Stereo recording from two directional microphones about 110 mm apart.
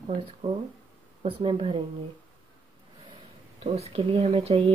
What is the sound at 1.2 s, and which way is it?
Speech, 65° right (ahead or behind).